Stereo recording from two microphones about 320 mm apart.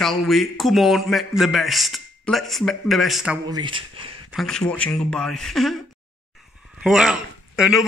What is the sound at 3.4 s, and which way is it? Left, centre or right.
Speech, centre.